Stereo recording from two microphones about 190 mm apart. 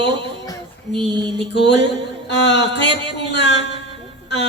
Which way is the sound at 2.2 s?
65° left (ahead or behind).